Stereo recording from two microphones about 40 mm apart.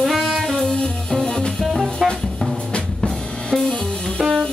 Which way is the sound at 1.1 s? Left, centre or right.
Centre.